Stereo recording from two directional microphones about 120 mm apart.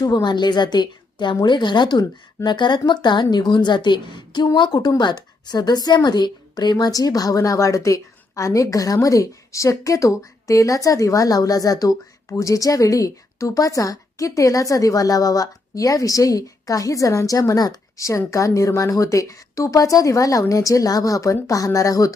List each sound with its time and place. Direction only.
0.0 s a woman's voice: 35° left (ahead or behind)